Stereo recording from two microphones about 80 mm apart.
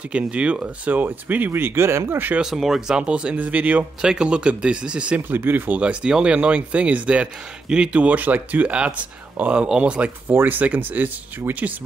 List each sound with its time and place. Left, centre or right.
0.1 s speech: centre
2.4 s speech: centre
3.0 s speech: centre
5.8 s speech: centre